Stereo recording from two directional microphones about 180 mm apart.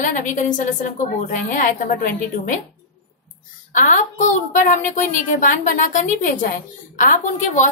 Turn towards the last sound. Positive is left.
turn(degrees=45)  # may be behind; listen again after turning